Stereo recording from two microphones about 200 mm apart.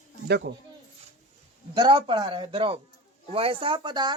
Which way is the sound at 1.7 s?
20° right (ahead or behind).